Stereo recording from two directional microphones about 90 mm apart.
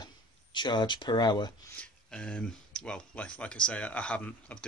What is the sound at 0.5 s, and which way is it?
Speech, 55° left (ahead or behind).